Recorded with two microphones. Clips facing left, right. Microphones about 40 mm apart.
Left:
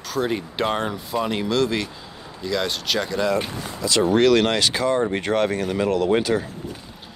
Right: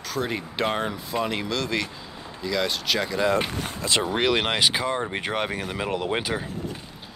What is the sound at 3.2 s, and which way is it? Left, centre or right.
Speech, right.